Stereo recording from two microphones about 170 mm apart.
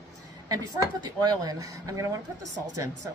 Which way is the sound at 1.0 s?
25° right (ahead or behind).